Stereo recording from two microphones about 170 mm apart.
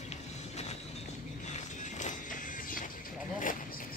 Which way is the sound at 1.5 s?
45° left (ahead or behind).